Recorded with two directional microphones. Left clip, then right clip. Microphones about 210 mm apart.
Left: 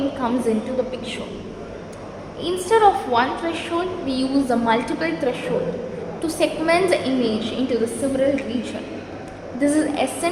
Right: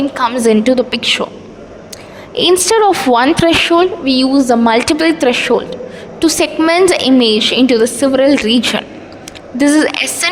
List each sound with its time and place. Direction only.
0.2 s a woman's voice: 50° right (ahead or behind)
2.4 s a woman's voice: 50° right (ahead or behind)